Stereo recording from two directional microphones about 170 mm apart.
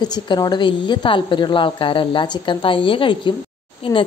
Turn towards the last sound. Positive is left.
turn(degrees=30)  # may be behind; listen again after turning